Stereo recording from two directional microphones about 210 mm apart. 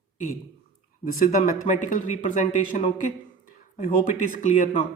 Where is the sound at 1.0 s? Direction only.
40° left (ahead or behind).